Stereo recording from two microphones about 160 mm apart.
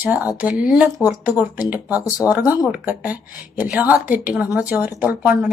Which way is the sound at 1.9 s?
20° left (ahead or behind).